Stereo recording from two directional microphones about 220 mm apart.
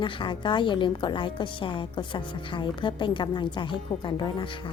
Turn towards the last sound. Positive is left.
turn(degrees=20)  # may be behind; listen again after turning